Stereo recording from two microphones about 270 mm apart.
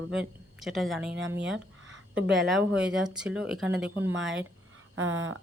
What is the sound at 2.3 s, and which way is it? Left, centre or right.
Speech, centre.